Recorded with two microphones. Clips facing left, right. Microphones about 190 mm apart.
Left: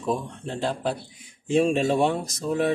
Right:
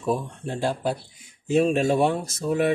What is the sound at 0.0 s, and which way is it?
Speech, 10° right (ahead or behind).